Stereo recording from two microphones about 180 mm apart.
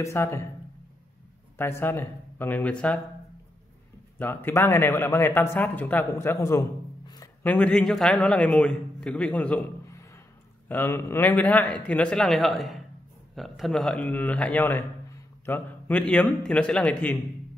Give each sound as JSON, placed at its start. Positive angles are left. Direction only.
{"t": 0.0, "sound": "speech", "side_deg": 15}
{"t": 1.6, "sound": "speech", "side_deg": 10}
{"t": 4.2, "sound": "a man's voice", "side_deg": 10}